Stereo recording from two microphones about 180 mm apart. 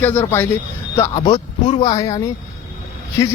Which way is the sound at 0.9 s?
20° left (ahead or behind).